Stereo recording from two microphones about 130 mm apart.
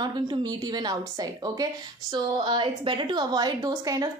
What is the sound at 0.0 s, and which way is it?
A woman's voice, 35° right (ahead or behind).